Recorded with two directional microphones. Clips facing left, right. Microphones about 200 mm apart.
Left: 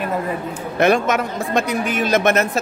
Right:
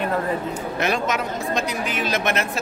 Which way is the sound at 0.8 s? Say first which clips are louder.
Left 8 dB; 55° left (ahead or behind).